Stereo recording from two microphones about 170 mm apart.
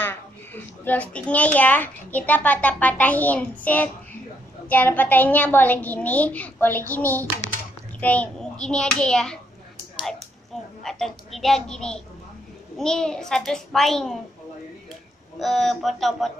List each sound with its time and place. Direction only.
0.0 s a child's voice: 10° left (ahead or behind)
10.8 s a child's voice: centre (ahead or behind)
15.3 s a child's voice: centre (ahead or behind)